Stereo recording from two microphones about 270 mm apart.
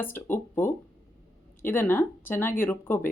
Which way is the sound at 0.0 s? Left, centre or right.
Centre.